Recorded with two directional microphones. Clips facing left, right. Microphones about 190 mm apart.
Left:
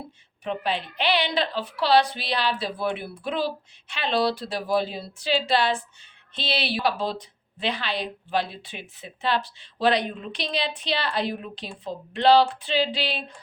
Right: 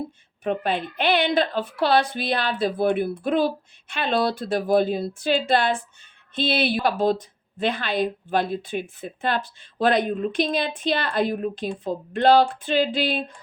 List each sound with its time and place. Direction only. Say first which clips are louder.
0.4 s a woman's voice: right 4 dB; 50° right (ahead or behind)